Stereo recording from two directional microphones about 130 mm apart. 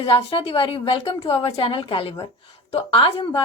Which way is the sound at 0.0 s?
45° left (ahead or behind).